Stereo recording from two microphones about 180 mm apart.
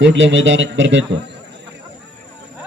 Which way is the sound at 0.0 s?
90° right.